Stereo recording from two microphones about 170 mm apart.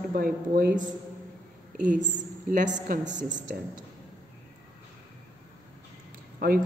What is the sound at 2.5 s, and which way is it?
A woman's voice, 50° right (ahead or behind).